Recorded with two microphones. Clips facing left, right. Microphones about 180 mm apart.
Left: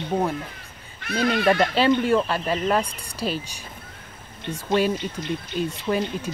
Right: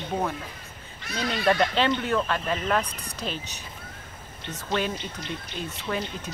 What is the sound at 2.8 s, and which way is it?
Speech, 10° left (ahead or behind).